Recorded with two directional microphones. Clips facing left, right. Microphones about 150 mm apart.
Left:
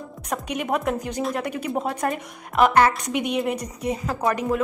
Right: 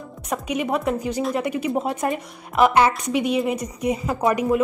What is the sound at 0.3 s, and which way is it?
A woman's voice, 5° right (ahead or behind).